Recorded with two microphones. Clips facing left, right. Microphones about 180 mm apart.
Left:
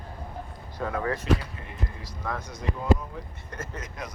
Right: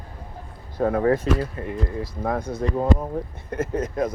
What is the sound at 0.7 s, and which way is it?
Speech, 45° right (ahead or behind).